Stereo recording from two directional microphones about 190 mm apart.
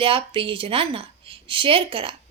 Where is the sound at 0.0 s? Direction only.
30° right (ahead or behind).